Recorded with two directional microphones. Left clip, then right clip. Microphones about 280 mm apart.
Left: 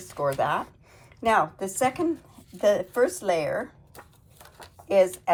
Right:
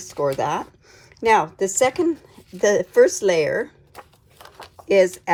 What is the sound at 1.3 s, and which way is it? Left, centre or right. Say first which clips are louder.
Speech: right 6 dB; right.